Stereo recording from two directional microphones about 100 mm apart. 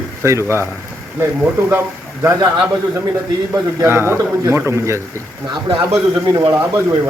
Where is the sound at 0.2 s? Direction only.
30° right (ahead or behind).